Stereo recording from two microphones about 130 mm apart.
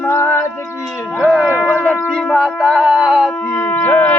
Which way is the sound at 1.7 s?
10° left (ahead or behind).